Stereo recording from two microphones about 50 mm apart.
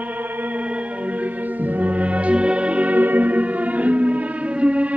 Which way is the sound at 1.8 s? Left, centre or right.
Right.